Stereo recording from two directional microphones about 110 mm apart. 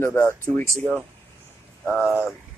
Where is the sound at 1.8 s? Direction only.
5° right (ahead or behind).